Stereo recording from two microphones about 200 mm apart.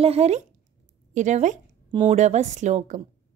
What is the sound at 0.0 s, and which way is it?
Speech, 30° right (ahead or behind).